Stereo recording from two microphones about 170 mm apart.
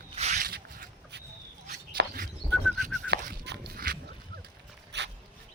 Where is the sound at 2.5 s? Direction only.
5° left (ahead or behind).